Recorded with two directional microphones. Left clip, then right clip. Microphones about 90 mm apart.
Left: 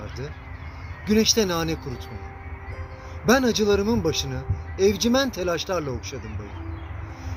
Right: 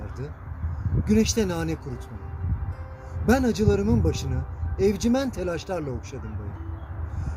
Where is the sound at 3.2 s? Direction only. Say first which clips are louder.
Left 3 dB; 60° right (ahead or behind).